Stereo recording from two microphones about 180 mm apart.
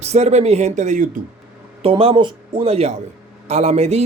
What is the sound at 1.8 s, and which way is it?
Speech, 30° right (ahead or behind).